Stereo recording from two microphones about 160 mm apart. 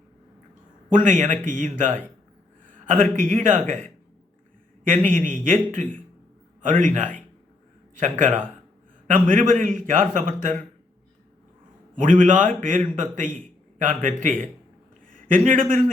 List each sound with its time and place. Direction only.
0.9 s a man's voice: 55° right (ahead or behind)
11.9 s a man's voice: 55° right (ahead or behind)
15.0 s a sound: 55° right (ahead or behind)